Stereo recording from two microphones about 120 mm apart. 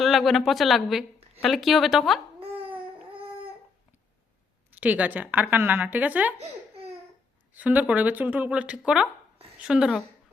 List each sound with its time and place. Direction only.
0.0 s a woman's voice: centre (ahead or behind)
4.7 s speech: 15° right (ahead or behind)
6.4 s a sound: 55° right (ahead or behind)
7.5 s a woman's voice: 15° right (ahead or behind)